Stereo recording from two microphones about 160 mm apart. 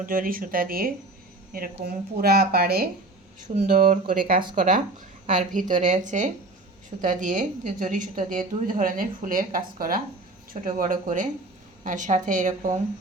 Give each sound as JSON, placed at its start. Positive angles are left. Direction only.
{"t": 0.0, "sound": "a woman's voice", "side_deg": -60}
{"t": 1.8, "sound": "a woman's voice", "side_deg": -75}
{"t": 3.4, "sound": "a woman's voice", "side_deg": -55}